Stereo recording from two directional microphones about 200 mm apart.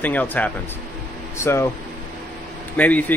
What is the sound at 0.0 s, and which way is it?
Speech, 10° left (ahead or behind).